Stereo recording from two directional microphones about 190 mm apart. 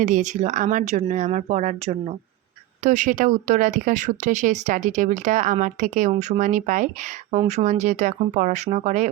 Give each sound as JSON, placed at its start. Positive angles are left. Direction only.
{"t": 0.0, "sound": "speech", "side_deg": -40}